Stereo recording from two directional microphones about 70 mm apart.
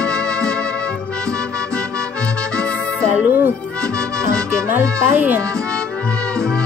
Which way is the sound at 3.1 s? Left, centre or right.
Right.